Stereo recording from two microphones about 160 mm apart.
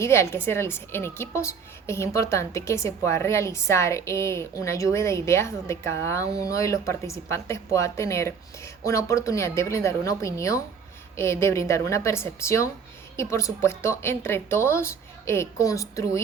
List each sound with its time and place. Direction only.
0.0 s a woman's voice: 15° left (ahead or behind)